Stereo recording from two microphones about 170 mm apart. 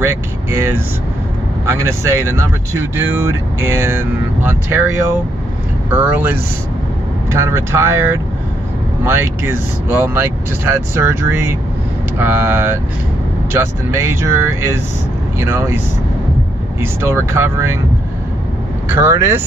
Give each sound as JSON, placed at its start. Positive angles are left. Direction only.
{"t": 0.0, "sound": "speech", "side_deg": -15}
{"t": 5.9, "sound": "speech", "side_deg": -10}
{"t": 16.8, "sound": "speech", "side_deg": -15}
{"t": 18.9, "sound": "speech", "side_deg": -15}